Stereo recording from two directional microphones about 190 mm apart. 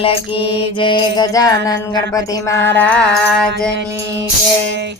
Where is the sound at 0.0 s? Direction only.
30° left (ahead or behind).